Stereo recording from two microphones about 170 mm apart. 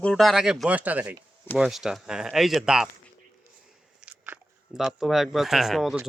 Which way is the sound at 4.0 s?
10° right (ahead or behind).